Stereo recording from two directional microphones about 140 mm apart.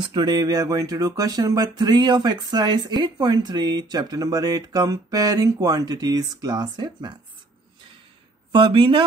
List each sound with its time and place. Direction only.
0.0 s speech: 30° right (ahead or behind)
8.5 s speech: 35° right (ahead or behind)